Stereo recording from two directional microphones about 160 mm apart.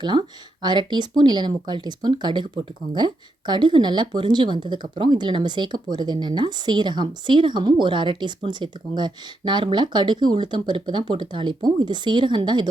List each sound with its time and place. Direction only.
0.0 s speech: 30° right (ahead or behind)